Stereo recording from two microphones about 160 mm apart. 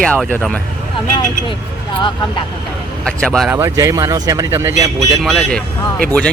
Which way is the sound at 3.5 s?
20° right (ahead or behind).